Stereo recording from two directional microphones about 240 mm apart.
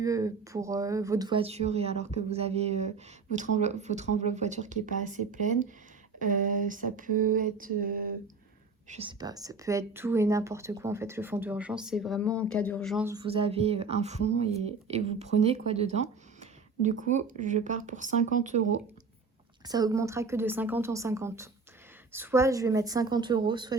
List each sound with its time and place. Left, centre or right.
0.0 s speech: centre; by 5.5 s right
6.1 s a sound: right
8.9 s speech: right; by 13.1 s centre
13.1 s speech: centre
19.6 s speech: centre